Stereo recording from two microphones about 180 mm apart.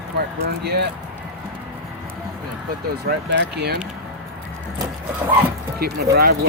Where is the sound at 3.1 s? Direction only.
70° right (ahead or behind).